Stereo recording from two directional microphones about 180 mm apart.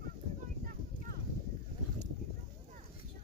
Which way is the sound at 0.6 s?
55° right (ahead or behind).